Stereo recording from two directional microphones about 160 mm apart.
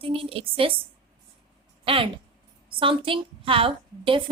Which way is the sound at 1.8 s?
35° right (ahead or behind).